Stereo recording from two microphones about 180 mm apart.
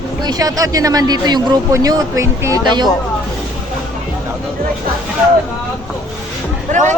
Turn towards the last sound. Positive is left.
turn(degrees=-45)  # may be behind; listen again after turning